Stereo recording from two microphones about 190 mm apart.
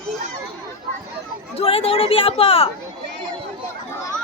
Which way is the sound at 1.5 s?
30° left (ahead or behind).